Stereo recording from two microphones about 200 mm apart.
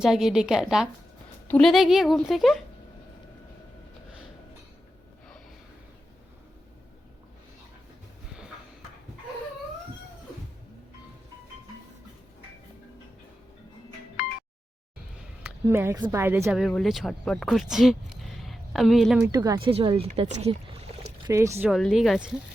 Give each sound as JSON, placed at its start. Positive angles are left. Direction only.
{"t": 0.0, "sound": "a woman's voice", "side_deg": 0}
{"t": 15.6, "sound": "speech", "side_deg": -10}
{"t": 19.2, "sound": "speech", "side_deg": -20}
{"t": 21.2, "sound": "speech", "side_deg": -15}
{"t": 21.7, "sound": "a woman's voice", "side_deg": 0}